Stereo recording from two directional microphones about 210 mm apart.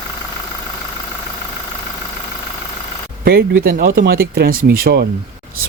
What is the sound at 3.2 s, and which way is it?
Speech, 45° right (ahead or behind).